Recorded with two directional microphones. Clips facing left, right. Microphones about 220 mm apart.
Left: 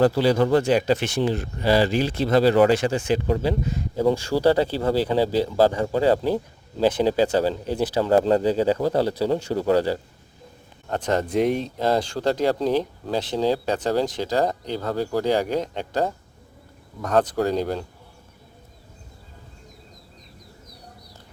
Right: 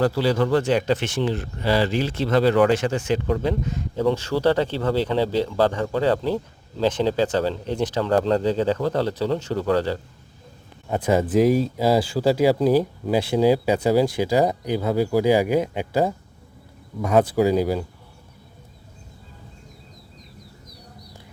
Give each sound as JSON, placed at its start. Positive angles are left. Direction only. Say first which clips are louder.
{"t": 0.0, "sound": "speech", "louder": "left 2 dB", "side_deg": 15}
{"t": 2.3, "sound": "speech", "louder": "left 1 dB", "side_deg": 35}
{"t": 3.4, "sound": "a man's voice", "louder": "even", "side_deg": 10}
{"t": 10.8, "sound": "speech", "louder": "right 3 dB", "side_deg": -10}